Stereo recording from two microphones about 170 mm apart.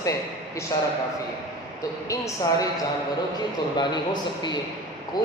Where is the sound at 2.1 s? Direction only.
20° left (ahead or behind).